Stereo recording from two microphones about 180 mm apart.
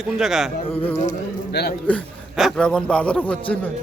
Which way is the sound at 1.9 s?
Centre (ahead or behind).